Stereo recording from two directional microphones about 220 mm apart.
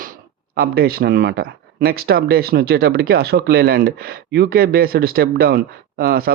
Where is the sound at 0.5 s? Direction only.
45° right (ahead or behind).